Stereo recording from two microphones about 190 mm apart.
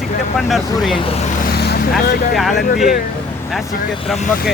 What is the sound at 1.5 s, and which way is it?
Vehicle, 60° left (ahead or behind).